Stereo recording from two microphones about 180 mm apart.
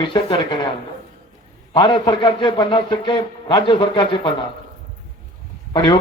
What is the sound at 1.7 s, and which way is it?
A man's voice, 25° left (ahead or behind).